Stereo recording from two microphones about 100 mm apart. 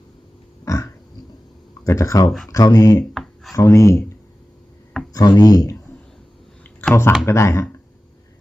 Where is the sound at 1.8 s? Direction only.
30° left (ahead or behind).